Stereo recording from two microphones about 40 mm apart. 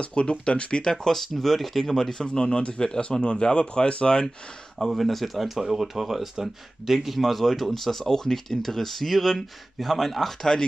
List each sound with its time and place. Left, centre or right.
0.0 s speech: left
1.0 s speech: centre
4.7 s speech: centre